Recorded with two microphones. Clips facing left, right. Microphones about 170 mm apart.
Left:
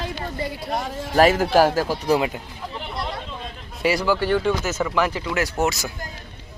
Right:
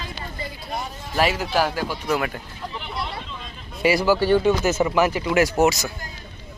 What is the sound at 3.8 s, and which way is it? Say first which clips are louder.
Speech: right 2 dB; 5° right (ahead or behind).